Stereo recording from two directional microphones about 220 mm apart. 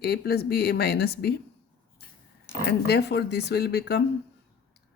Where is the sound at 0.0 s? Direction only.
45° left (ahead or behind).